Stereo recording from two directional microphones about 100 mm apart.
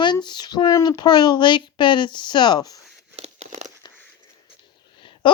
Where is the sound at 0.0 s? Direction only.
50° left (ahead or behind).